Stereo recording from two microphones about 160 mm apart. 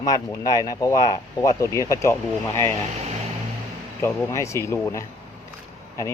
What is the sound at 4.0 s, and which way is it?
Speech, 20° left (ahead or behind).